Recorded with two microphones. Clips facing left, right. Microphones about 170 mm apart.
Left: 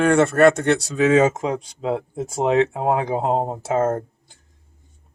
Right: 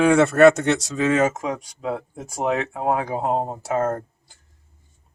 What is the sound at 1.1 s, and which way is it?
Speech, 25° left (ahead or behind).